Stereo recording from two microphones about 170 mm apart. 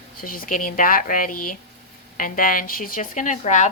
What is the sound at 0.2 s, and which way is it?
A woman's voice, 55° left (ahead or behind).